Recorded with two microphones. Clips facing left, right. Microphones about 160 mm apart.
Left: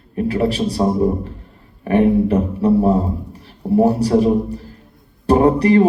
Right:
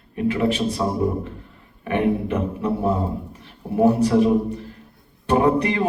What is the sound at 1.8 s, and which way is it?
A man's voice, 35° left (ahead or behind).